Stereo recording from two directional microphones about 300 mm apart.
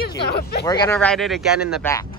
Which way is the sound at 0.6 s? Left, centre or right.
Centre.